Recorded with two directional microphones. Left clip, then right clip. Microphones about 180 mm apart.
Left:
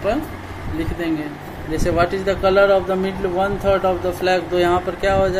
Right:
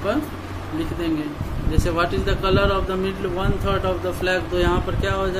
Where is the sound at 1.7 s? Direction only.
15° left (ahead or behind).